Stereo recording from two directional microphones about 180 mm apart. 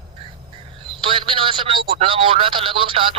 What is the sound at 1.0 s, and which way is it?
Speech, 30° right (ahead or behind).